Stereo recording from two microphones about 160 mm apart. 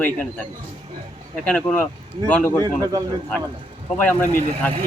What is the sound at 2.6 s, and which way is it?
Speech, 25° right (ahead or behind).